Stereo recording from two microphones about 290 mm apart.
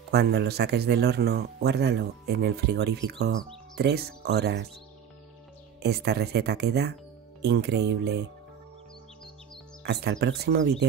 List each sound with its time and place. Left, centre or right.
0.1 s speech: right
5.8 s speech: right
9.8 s speech: right